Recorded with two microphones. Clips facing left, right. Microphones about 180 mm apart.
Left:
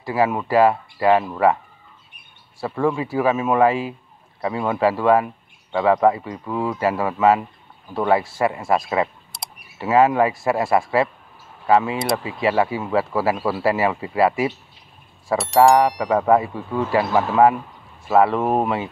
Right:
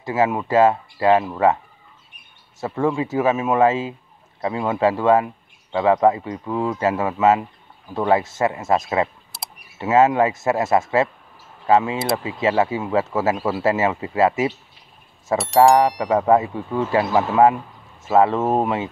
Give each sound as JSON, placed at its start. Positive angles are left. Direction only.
{"t": 0.0, "sound": "speech", "side_deg": -20}
{"t": 2.6, "sound": "speech", "side_deg": -20}
{"t": 9.3, "sound": "camera", "side_deg": 0}
{"t": 9.8, "sound": "speech", "side_deg": -20}
{"t": 15.3, "sound": "speech", "side_deg": 0}
{"t": 16.0, "sound": "speech", "side_deg": -20}